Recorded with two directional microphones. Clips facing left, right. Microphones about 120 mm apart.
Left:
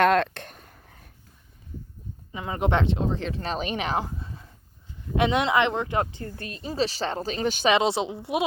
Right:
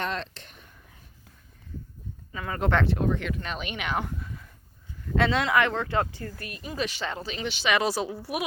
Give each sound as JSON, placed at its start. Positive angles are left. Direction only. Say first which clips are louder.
{"t": 0.0, "sound": "a sound", "louder": "left 12 dB", "side_deg": 60}
{"t": 2.3, "sound": "speech", "louder": "left 1 dB", "side_deg": 20}
{"t": 7.7, "sound": "speech", "louder": "left 2 dB", "side_deg": 25}